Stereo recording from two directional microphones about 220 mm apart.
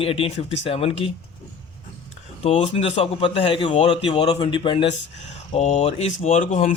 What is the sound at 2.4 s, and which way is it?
A man's voice, 30° left (ahead or behind).